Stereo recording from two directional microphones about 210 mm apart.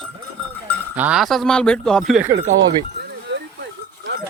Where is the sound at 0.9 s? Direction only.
5° right (ahead or behind).